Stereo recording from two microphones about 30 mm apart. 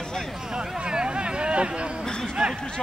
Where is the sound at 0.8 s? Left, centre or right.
Right.